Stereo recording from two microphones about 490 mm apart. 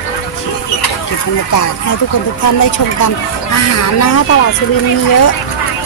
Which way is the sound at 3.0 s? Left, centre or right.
Left.